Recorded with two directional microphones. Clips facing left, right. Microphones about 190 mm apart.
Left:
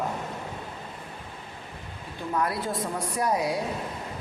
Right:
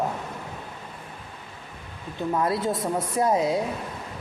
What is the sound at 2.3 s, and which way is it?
Speech, 25° right (ahead or behind).